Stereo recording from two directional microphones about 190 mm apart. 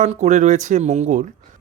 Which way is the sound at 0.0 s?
40° right (ahead or behind).